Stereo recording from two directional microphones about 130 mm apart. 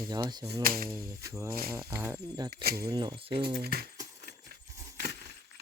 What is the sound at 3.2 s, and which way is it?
Speech, 45° right (ahead or behind).